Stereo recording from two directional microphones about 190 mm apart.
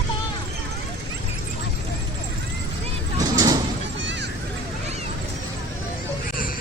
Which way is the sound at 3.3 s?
20° right (ahead or behind).